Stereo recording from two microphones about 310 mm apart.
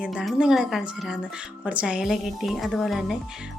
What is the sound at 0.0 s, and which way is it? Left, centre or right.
A woman's voice, centre.